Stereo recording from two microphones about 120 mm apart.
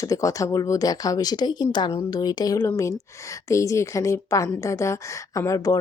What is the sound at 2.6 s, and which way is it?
A woman's voice, 20° left (ahead or behind).